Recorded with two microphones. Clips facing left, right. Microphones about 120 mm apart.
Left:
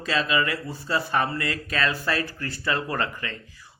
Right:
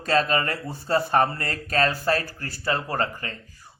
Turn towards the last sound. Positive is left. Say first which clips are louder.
# left 1 dB
turn(degrees=-40)  # may be behind; listen again after turning